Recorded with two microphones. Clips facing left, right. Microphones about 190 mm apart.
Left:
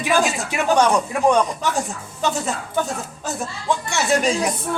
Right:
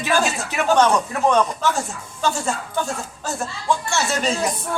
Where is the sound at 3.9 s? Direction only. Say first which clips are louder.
Left 3 dB; 15° left (ahead or behind).